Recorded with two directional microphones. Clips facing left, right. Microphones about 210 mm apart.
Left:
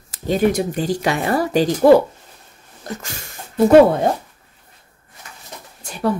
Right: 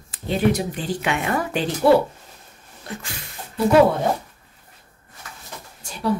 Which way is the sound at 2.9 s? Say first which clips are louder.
Left 3 dB; 45° left (ahead or behind).